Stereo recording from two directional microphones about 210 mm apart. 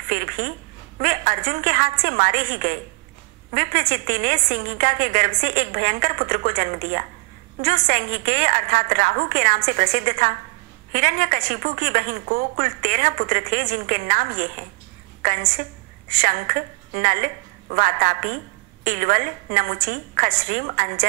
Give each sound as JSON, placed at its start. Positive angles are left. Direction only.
{"t": 0.1, "sound": "a sound", "side_deg": -40}
{"t": 1.0, "sound": "a woman's voice", "side_deg": -40}
{"t": 16.2, "sound": "a woman's voice", "side_deg": -40}